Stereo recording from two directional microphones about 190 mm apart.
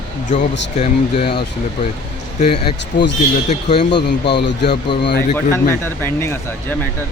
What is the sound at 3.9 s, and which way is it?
Speech, 65° left (ahead or behind).